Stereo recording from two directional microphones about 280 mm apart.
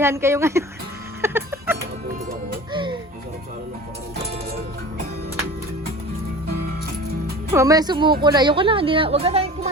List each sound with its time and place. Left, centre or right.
0.0 s speech: centre
1.2 s music: centre
7.5 s a woman's voice: centre